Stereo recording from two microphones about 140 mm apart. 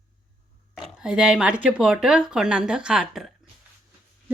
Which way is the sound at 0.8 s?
5° right (ahead or behind).